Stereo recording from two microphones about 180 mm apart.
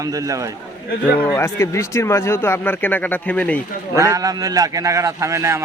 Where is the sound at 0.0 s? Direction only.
20° right (ahead or behind).